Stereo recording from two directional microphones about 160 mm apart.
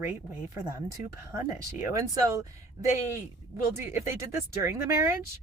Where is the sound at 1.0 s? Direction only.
50° left (ahead or behind).